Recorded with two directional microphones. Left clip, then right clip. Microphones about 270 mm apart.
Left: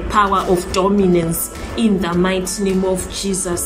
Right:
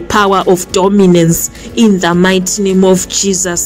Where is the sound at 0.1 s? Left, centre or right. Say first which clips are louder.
Right 6 dB; right.